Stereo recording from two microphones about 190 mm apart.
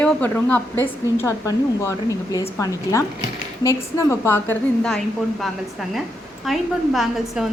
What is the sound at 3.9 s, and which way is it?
Speech, 15° left (ahead or behind).